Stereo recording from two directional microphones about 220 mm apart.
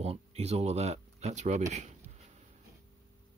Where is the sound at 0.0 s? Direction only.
30° right (ahead or behind).